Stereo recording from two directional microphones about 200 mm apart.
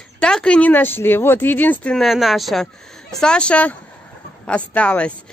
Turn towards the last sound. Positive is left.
turn(degrees=5)  # may be behind; listen again after turning